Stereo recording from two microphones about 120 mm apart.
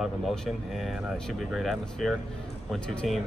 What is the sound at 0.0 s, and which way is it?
Speech, centre (ahead or behind).